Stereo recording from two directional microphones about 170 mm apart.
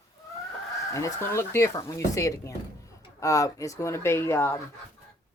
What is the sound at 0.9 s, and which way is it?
Speech, 20° left (ahead or behind).